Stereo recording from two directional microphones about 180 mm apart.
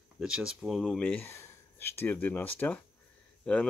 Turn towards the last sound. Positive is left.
turn(degrees=5)  # may be behind; listen again after turning